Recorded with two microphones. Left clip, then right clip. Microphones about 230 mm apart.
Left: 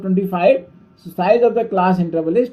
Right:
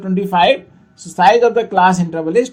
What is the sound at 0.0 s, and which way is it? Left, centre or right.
Speech, right.